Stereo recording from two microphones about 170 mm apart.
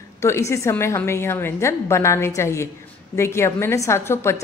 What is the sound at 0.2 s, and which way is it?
A woman's voice, 15° left (ahead or behind).